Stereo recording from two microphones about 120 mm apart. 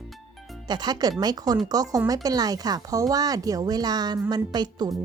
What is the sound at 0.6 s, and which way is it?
Speech, 35° right (ahead or behind).